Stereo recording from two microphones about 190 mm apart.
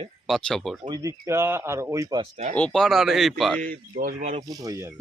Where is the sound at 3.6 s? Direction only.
45° right (ahead or behind).